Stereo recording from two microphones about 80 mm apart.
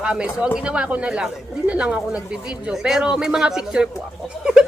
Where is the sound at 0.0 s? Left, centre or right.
Centre.